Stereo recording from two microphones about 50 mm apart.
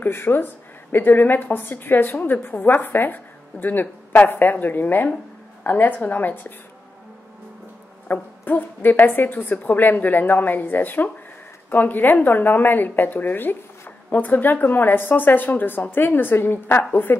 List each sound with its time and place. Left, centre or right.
0.0 s a woman's voice: left
8.1 s a woman's voice: left